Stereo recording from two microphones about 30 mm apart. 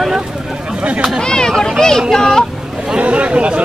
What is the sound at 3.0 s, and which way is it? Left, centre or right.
Speech, right.